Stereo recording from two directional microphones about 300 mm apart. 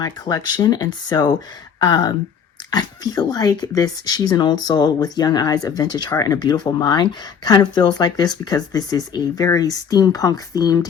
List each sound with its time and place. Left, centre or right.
0.0 s speech: centre